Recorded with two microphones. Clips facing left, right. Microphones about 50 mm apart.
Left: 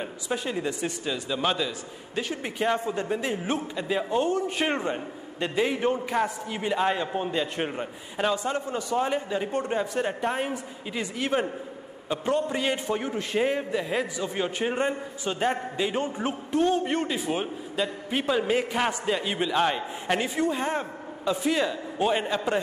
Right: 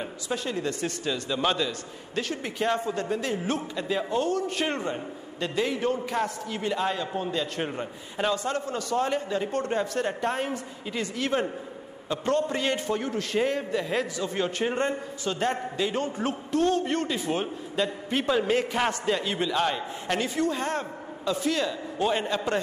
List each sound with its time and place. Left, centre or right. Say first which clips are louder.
0.0 s a man's voice: left 1 dB; centre